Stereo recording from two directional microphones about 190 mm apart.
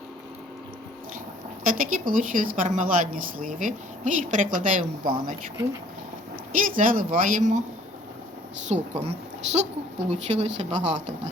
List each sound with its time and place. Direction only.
1.6 s speech: 45° right (ahead or behind)
6.5 s speech: 45° right (ahead or behind)
8.7 s a woman's voice: 35° right (ahead or behind)